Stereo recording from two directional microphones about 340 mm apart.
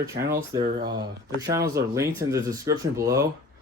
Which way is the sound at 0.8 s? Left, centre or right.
Centre.